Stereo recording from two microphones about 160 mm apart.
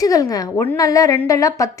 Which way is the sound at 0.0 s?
20° left (ahead or behind).